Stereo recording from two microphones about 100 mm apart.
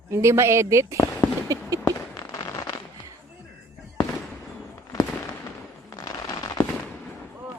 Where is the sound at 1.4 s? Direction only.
35° right (ahead or behind).